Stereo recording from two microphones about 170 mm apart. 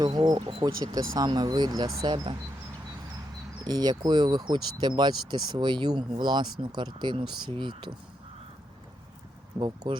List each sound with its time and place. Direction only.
0.0 s speech: 25° right (ahead or behind)
0.9 s speech: 20° right (ahead or behind)
3.6 s speech: 25° right (ahead or behind)
9.6 s speech: 25° right (ahead or behind)